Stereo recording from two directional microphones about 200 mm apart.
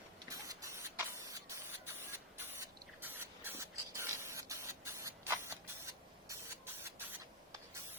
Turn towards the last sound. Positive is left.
turn(degrees=-10)  # may be behind; listen again after turning